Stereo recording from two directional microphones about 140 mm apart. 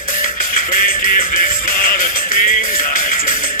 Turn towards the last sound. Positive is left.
turn(degrees=80)